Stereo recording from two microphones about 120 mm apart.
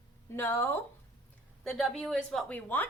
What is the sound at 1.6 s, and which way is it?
A woman's voice, centre (ahead or behind).